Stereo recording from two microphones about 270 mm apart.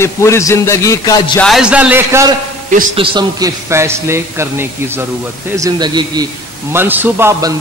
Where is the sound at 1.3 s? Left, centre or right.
Centre.